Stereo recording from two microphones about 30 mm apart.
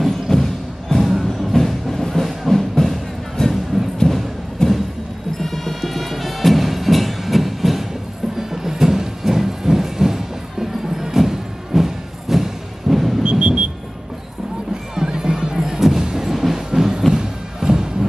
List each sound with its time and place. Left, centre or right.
0.3 s music: centre
0.9 s music: centre
4.0 s thump: centre
4.6 s a sound: left
5.4 s music: centre
13.2 s a sound: right
15.0 s music: right
15.5 s music: centre
16.3 s music: centre
17.1 s music: right